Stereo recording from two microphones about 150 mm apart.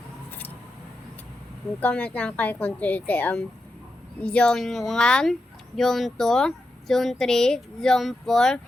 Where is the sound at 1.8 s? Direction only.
10° left (ahead or behind).